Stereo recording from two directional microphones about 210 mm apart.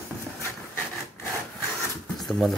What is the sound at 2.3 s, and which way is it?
Speech, centre (ahead or behind).